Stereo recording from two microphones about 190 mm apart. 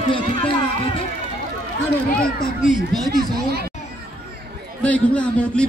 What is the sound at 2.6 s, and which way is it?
Speech, centre (ahead or behind).